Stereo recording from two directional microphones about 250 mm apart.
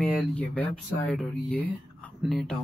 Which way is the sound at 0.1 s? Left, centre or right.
Centre.